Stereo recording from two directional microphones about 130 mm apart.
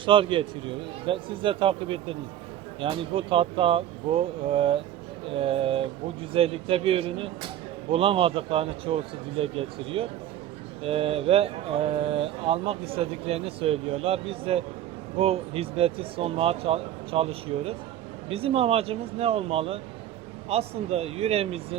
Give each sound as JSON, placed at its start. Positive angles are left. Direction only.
{"t": 0.0, "sound": "speech", "side_deg": -40}